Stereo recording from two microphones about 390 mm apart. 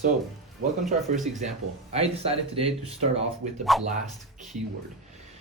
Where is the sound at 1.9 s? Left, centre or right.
Centre.